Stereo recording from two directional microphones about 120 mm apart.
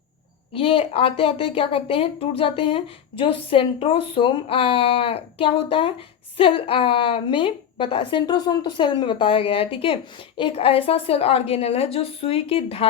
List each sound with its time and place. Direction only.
0.5 s a woman's voice: 50° left (ahead or behind)